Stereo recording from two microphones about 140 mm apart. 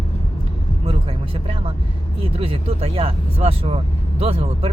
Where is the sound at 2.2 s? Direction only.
40° right (ahead or behind).